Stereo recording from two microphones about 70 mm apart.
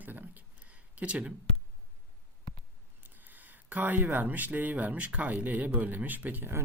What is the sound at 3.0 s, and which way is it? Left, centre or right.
Speech, right.